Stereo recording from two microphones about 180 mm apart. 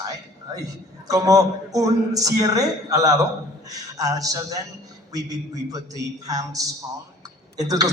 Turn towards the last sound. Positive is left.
turn(degrees=-20)  # may be behind; listen again after turning